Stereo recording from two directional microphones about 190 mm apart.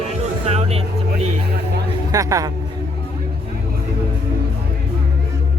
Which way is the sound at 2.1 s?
20° right (ahead or behind).